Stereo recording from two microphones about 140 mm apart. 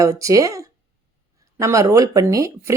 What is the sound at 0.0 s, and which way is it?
Speech, 25° right (ahead or behind).